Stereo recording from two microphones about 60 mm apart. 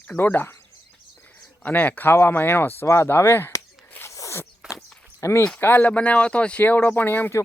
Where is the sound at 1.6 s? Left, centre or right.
Left.